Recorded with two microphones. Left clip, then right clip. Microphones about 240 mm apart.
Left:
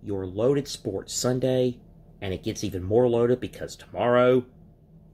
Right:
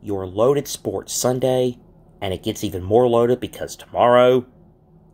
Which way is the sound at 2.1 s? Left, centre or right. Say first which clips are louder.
Right 6 dB; centre.